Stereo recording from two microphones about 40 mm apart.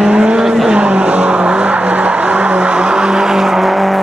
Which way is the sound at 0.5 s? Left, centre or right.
Centre.